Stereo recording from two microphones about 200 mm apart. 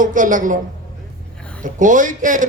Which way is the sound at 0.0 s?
40° right (ahead or behind).